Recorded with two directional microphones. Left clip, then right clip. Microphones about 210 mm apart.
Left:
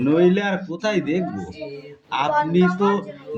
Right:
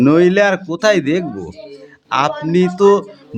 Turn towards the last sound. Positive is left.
turn(degrees=-50)  # may be behind; listen again after turning